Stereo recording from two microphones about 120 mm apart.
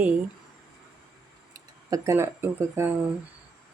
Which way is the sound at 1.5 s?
25° right (ahead or behind).